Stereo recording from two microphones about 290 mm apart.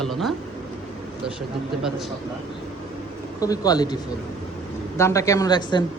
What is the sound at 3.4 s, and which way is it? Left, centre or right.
Speech, centre.